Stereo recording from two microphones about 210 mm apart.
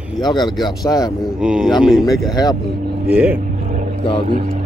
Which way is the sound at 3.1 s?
5° right (ahead or behind).